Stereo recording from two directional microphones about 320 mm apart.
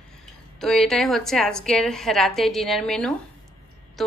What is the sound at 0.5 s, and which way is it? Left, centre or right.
A woman's voice, centre.